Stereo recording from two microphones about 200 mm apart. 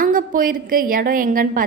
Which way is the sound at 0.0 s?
45° right (ahead or behind).